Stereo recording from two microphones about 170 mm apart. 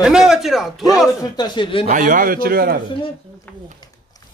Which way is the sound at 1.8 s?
55° right (ahead or behind).